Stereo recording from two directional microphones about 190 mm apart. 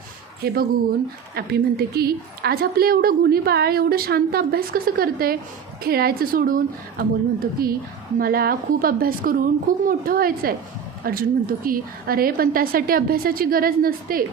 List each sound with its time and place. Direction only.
0.4 s a woman's voice: 50° right (ahead or behind)